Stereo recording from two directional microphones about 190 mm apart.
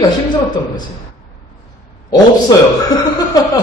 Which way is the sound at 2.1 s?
20° left (ahead or behind).